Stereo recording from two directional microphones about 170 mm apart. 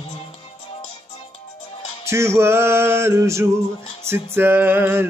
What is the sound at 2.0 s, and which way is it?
Music, 15° right (ahead or behind).